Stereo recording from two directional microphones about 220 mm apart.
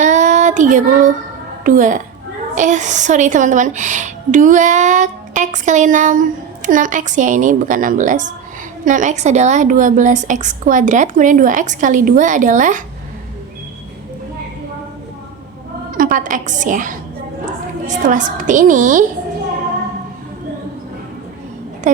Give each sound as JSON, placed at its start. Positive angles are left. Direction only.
{"t": 0.0, "sound": "child singing", "side_deg": -35}
{"t": 1.6, "sound": "a woman's voice", "side_deg": -35}
{"t": 15.9, "sound": "a woman's voice", "side_deg": -40}